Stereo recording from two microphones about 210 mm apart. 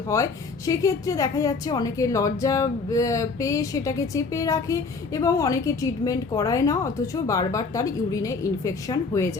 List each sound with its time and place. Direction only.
0.1 s a woman's voice: 15° left (ahead or behind)